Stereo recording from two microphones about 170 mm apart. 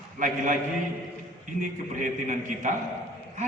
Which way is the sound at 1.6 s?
50° right (ahead or behind).